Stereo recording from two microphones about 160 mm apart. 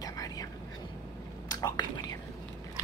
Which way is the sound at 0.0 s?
20° left (ahead or behind).